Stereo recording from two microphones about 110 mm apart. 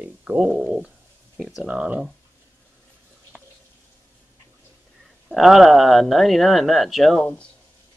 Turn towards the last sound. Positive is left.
turn(degrees=10)  # may be behind; listen again after turning